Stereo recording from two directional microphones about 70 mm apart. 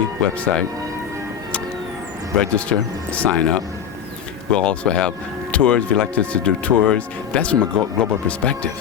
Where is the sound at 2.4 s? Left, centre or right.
Centre.